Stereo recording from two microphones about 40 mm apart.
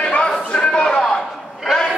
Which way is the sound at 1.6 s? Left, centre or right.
Centre.